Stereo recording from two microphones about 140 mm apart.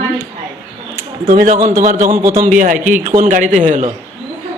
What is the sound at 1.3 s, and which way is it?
Speech, 75° right (ahead or behind).